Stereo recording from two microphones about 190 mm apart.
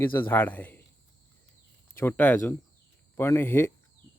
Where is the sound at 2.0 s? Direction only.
10° left (ahead or behind).